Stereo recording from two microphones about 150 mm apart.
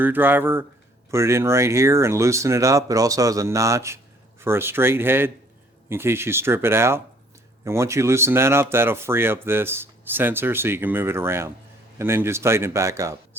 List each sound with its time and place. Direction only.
0.0 s speech: 15° right (ahead or behind)